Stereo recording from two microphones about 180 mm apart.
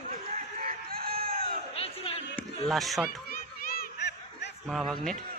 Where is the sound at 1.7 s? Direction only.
35° left (ahead or behind).